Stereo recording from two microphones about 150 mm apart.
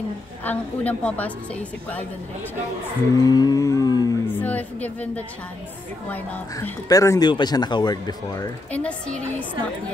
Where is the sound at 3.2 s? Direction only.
25° left (ahead or behind).